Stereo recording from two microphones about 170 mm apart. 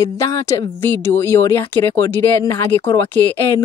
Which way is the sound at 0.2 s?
15° left (ahead or behind).